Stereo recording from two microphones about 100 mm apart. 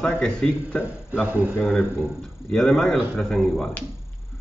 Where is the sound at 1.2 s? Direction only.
15° right (ahead or behind).